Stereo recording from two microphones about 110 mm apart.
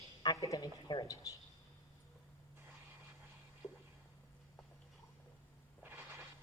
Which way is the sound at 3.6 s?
10° left (ahead or behind).